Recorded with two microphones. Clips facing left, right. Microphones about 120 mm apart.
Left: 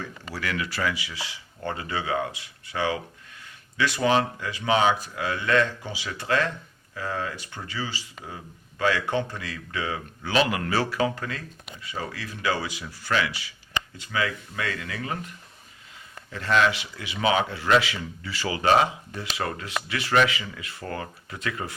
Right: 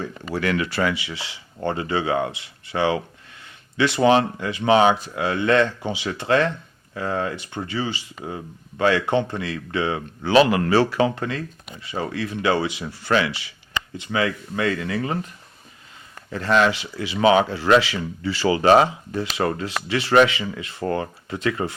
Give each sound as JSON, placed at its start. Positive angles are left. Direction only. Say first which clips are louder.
{"t": 0.9, "sound": "speech", "louder": "right 4 dB", "side_deg": -25}
{"t": 16.3, "sound": "speech", "louder": "right 4 dB", "side_deg": -35}